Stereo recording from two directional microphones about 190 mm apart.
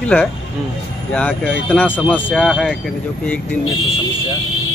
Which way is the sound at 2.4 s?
5° right (ahead or behind).